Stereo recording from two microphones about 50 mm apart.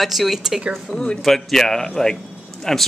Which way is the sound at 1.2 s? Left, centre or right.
Centre.